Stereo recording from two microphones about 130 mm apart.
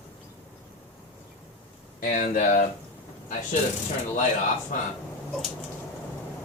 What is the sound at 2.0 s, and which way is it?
Speech, 90° left.